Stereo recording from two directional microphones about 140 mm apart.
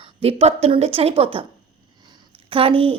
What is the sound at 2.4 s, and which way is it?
Speech, 40° right (ahead or behind).